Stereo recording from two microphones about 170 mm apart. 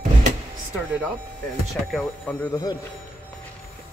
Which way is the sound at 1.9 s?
Centre (ahead or behind).